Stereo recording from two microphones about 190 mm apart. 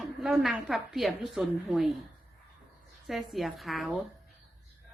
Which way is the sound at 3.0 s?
Centre (ahead or behind).